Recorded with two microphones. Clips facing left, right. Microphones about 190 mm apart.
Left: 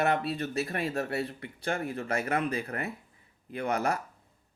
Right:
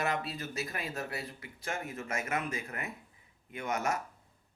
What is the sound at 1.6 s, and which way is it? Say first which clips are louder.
Speech: left 6 dB; 35° left (ahead or behind).